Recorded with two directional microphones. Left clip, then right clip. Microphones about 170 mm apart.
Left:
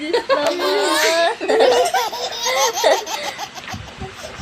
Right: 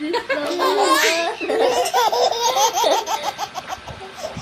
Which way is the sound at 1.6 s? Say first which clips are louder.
Left 2 dB; centre (ahead or behind).